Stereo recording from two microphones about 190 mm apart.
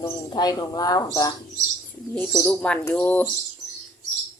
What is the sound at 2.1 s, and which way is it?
Speech, 5° left (ahead or behind).